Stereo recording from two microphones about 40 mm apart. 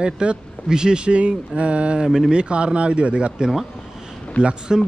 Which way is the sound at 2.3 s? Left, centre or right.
Right.